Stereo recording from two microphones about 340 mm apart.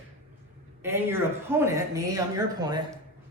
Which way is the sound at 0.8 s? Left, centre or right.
Centre.